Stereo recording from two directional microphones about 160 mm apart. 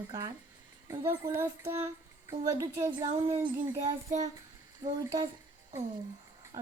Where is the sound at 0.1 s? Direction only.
25° right (ahead or behind).